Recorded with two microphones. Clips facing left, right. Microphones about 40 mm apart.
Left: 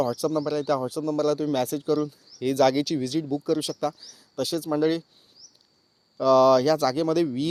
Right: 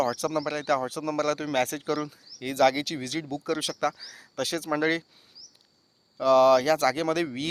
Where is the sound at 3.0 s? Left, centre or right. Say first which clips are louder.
Left 5 dB; right.